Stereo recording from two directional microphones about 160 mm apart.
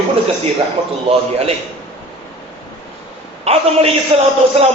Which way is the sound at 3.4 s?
40° right (ahead or behind).